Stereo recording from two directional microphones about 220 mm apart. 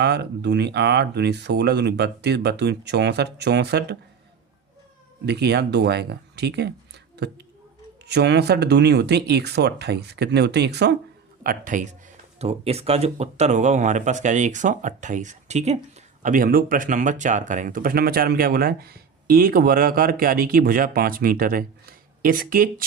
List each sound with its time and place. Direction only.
0.0 s speech: 50° right (ahead or behind)
5.2 s speech: 50° right (ahead or behind)
11.4 s speech: 35° right (ahead or behind)